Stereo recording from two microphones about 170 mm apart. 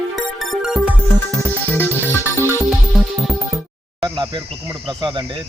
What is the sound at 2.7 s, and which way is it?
Music, centre (ahead or behind).